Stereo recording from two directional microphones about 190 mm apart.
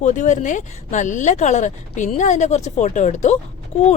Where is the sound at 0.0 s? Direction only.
40° left (ahead or behind).